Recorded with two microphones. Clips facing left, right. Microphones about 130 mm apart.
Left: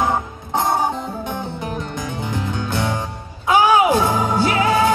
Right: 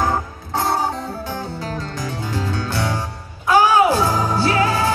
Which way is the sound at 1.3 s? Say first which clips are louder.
Left 1 dB; 20° left (ahead or behind).